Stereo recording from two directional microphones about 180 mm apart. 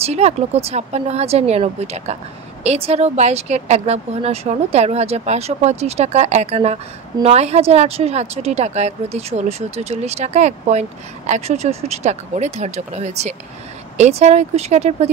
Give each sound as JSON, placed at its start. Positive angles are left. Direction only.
{"t": 0.0, "sound": "a woman's voice", "side_deg": -35}